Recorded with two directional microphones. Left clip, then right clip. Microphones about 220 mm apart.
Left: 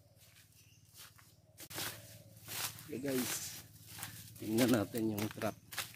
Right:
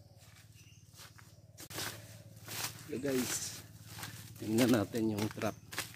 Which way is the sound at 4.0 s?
10° left (ahead or behind).